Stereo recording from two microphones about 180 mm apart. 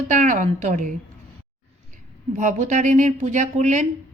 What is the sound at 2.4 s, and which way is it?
A woman's voice, 40° right (ahead or behind).